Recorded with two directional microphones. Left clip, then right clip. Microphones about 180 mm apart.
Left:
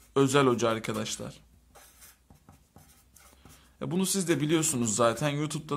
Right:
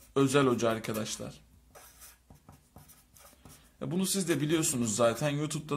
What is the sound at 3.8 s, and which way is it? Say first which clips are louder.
A man's voice: left 2 dB; 25° left (ahead or behind).